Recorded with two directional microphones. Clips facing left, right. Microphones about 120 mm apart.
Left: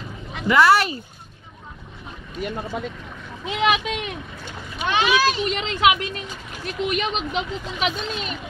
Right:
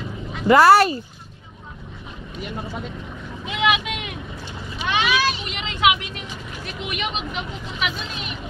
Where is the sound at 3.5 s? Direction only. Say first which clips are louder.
Left 1 dB; 35° left (ahead or behind).